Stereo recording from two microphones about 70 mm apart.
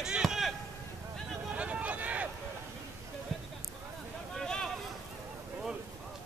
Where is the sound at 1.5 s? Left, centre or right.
Centre.